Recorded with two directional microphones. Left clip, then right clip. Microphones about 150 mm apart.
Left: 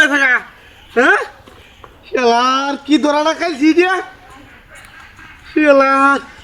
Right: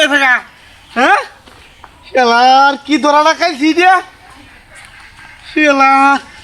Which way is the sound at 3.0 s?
15° right (ahead or behind).